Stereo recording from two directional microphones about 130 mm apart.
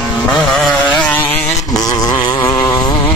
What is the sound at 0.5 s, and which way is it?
Vehicle, 5° left (ahead or behind).